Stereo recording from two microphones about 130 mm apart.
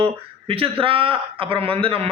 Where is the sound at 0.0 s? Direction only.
45° right (ahead or behind).